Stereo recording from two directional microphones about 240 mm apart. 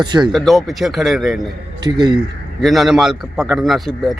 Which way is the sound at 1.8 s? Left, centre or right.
Centre.